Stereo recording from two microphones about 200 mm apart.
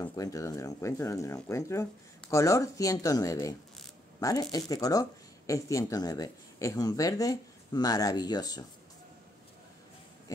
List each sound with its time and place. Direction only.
0.0 s speech: 15° left (ahead or behind)